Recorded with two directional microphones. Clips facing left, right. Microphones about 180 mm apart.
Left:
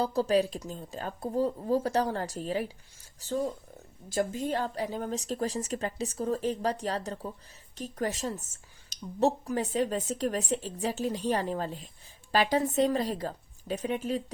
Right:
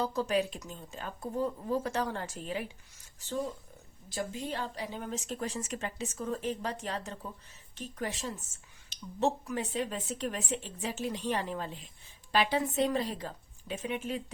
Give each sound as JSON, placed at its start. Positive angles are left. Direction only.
{"t": 0.0, "sound": "a woman's voice", "side_deg": 35}